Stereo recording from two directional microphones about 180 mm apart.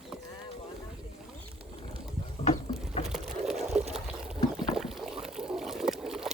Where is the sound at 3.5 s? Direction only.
40° right (ahead or behind).